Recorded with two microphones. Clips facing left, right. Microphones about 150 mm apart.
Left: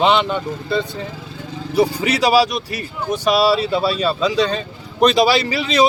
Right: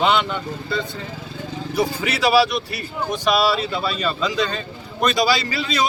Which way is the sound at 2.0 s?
40° left (ahead or behind).